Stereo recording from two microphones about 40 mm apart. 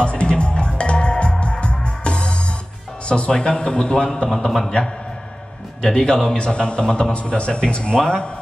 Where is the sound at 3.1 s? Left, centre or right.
Left.